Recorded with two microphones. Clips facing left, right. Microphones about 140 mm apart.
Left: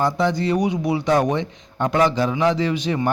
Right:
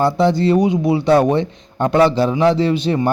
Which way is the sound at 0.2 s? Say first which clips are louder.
Right 6 dB; 30° right (ahead or behind).